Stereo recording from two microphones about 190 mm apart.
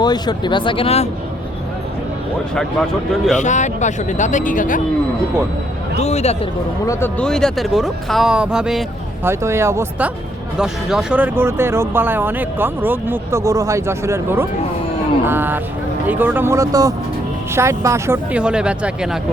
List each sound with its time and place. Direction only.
0.0 s speech: 20° left (ahead or behind)
3.3 s speech: 40° left (ahead or behind)
6.0 s speech: 35° left (ahead or behind)
6.8 s speech: 10° left (ahead or behind); by 10.1 s 15° right (ahead or behind)
10.6 s speech: 5° right (ahead or behind)